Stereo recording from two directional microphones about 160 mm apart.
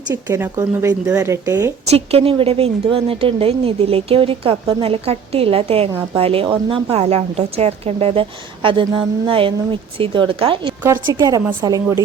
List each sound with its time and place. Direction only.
0.1 s speech: 15° right (ahead or behind)
1.9 s a woman's voice: 40° right (ahead or behind)
11.0 s a woman's voice: 20° right (ahead or behind)